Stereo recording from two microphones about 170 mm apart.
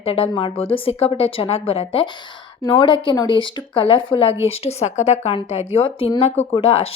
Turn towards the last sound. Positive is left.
turn(degrees=35)  # may be behind; listen again after turning